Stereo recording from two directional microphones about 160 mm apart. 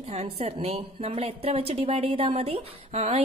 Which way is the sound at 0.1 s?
40° right (ahead or behind).